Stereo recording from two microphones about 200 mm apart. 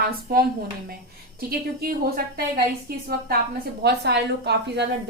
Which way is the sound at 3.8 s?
55° right (ahead or behind).